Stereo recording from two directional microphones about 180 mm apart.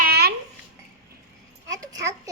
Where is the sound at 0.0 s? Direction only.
60° right (ahead or behind).